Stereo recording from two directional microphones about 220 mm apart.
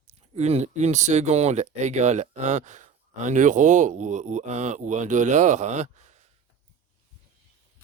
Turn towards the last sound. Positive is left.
turn(degrees=-30)  # may be behind; listen again after turning